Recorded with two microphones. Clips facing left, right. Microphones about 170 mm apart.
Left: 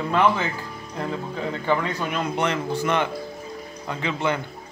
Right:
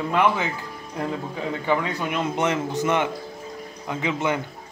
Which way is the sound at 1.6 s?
15° right (ahead or behind).